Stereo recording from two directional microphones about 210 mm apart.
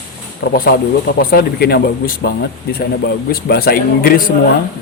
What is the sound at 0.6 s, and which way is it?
Speech, 45° left (ahead or behind).